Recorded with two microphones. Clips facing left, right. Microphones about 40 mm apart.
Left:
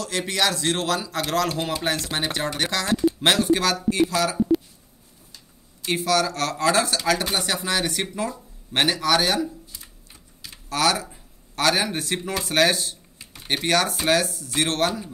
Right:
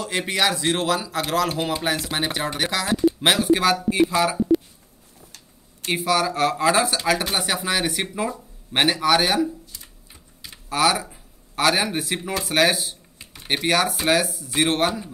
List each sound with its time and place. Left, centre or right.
0.0 s a man's voice: centre
5.9 s a man's voice: centre